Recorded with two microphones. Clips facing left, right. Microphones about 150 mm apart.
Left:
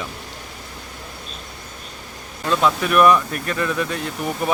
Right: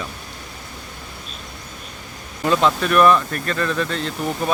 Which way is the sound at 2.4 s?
Centre (ahead or behind).